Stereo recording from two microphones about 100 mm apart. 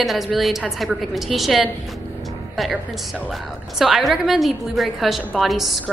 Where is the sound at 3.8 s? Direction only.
5° right (ahead or behind).